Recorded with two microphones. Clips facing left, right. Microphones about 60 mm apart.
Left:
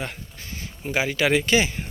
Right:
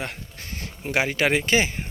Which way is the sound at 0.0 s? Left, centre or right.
Right.